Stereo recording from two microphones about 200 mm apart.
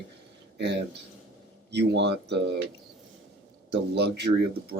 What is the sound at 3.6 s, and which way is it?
Speech, 55° right (ahead or behind).